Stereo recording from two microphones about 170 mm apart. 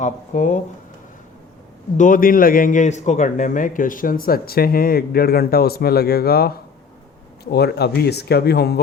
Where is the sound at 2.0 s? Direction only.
55° left (ahead or behind).